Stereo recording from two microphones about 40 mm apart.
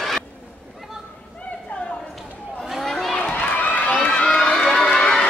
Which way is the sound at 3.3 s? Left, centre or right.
Left.